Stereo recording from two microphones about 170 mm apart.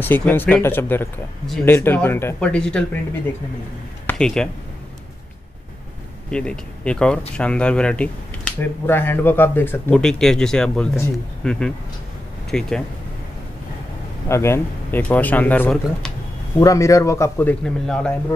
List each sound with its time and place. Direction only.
0.0 s speech: 10° left (ahead or behind)
4.1 s speech: 5° left (ahead or behind)
6.3 s speech: 5° left (ahead or behind)
14.3 s speech: 15° left (ahead or behind)
16.5 s speech: 20° left (ahead or behind)